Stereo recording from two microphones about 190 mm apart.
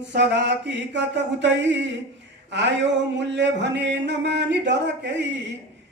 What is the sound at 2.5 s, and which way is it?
Music, 65° right (ahead or behind).